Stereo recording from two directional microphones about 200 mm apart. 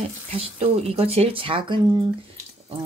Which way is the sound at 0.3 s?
30° right (ahead or behind).